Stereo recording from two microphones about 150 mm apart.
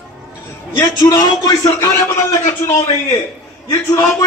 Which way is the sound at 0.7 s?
30° left (ahead or behind).